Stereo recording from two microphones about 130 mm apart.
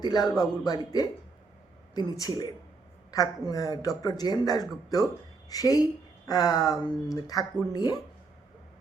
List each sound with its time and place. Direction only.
0.0 s a man's voice: 30° left (ahead or behind)